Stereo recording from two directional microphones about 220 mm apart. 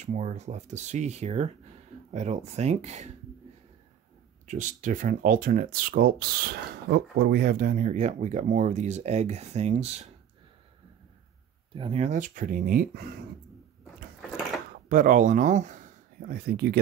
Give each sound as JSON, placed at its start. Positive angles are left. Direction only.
{"t": 0.0, "sound": "speech", "side_deg": -30}
{"t": 4.5, "sound": "speech", "side_deg": -35}
{"t": 11.7, "sound": "speech", "side_deg": -25}
{"t": 14.9, "sound": "speech", "side_deg": -35}